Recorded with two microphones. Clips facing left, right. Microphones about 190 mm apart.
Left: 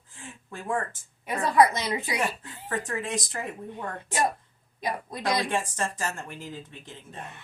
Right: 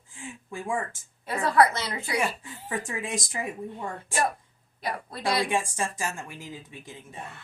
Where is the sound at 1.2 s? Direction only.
15° left (ahead or behind).